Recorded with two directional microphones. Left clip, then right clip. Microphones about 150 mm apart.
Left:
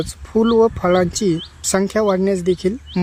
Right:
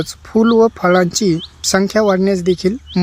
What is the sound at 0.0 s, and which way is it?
Speech, 35° right (ahead or behind).